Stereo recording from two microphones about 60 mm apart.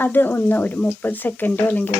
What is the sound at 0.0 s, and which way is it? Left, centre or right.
Speech, left.